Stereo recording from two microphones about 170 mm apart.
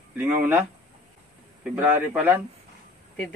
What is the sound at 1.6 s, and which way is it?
Speech, 10° right (ahead or behind).